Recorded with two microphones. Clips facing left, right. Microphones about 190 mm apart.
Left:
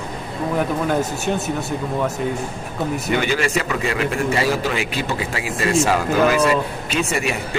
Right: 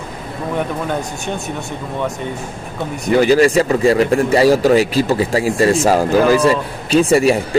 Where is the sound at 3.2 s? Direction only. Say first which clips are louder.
Right 9 dB; 35° right (ahead or behind).